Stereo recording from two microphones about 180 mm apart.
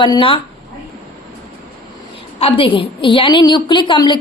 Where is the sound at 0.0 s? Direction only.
25° left (ahead or behind).